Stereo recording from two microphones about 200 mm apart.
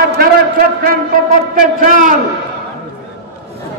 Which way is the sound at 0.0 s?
50° right (ahead or behind).